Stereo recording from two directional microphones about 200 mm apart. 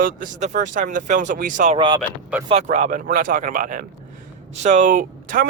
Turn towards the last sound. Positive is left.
turn(degrees=-45)  # may be behind; listen again after turning